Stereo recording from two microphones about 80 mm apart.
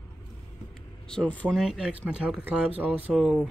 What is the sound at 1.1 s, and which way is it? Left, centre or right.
Speech, centre.